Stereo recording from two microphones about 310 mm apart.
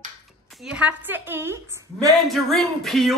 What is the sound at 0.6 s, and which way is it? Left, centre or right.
A woman's voice, centre.